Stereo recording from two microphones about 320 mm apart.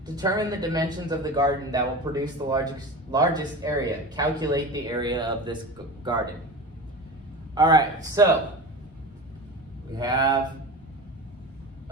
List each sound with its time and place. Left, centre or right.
0.0 s speech: centre
7.5 s speech: centre
10.0 s speech: centre